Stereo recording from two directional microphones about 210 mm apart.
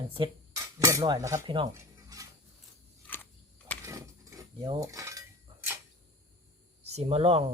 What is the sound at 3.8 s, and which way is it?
Mechanisms, 15° right (ahead or behind).